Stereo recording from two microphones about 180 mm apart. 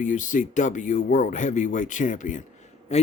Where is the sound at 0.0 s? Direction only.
45° left (ahead or behind).